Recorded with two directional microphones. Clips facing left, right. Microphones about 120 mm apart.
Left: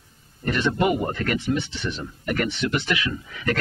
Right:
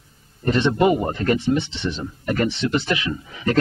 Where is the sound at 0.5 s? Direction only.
25° right (ahead or behind).